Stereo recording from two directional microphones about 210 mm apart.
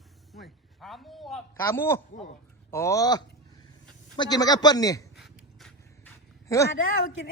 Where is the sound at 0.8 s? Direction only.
Centre (ahead or behind).